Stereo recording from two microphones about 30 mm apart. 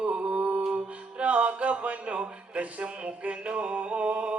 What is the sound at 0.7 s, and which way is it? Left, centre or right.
Music, right.